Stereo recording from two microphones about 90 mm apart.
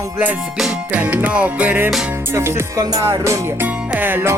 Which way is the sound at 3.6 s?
20° right (ahead or behind).